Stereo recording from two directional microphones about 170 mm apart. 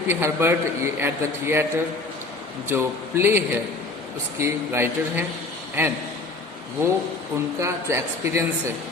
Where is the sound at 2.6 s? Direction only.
15° right (ahead or behind).